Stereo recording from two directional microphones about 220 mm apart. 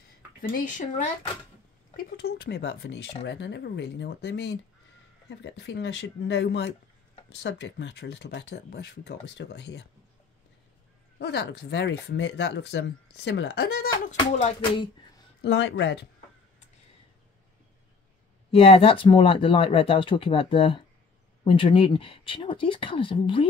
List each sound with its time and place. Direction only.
0.4 s speech: 35° left (ahead or behind)
11.1 s speech: 50° left (ahead or behind)
14.4 s speech: 25° left (ahead or behind)
15.4 s speech: 55° left (ahead or behind)
18.5 s speech: 25° left (ahead or behind)